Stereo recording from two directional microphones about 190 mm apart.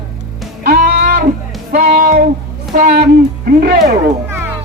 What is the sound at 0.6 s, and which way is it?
Music, 55° right (ahead or behind).